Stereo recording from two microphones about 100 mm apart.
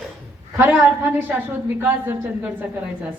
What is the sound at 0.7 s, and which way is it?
A woman's voice, 15° right (ahead or behind).